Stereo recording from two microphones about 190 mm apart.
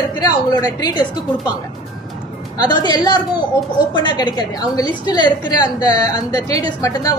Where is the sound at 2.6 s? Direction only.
20° left (ahead or behind).